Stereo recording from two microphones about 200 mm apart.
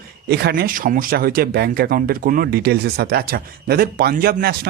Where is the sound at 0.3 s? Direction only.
55° right (ahead or behind).